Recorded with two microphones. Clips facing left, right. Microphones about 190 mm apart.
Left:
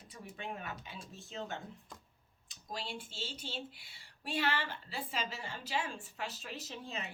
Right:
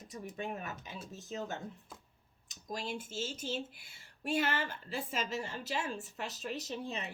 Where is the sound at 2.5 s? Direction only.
45° right (ahead or behind).